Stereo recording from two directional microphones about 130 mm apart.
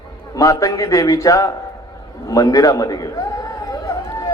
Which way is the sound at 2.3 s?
25° left (ahead or behind).